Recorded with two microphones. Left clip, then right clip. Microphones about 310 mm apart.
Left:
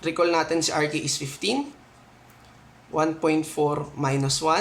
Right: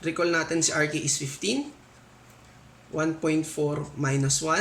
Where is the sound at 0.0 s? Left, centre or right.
Centre.